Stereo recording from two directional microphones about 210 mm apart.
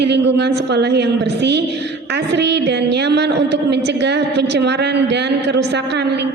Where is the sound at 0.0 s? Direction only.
55° right (ahead or behind).